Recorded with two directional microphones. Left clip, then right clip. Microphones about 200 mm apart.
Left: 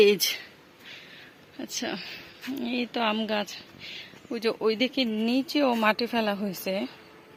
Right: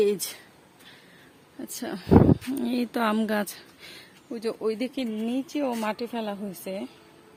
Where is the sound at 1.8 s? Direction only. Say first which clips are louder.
Left 3 dB; 20° right (ahead or behind).